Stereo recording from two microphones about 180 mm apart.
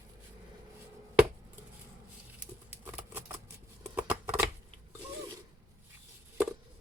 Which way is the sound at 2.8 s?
10° right (ahead or behind).